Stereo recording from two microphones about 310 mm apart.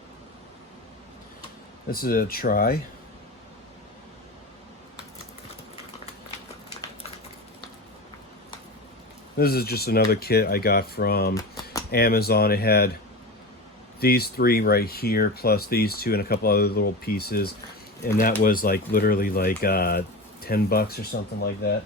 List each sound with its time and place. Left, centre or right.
1.9 s speech: left
9.4 s speech: left
11.3 s typewriter: centre
11.9 s speech: left
14.0 s speech: left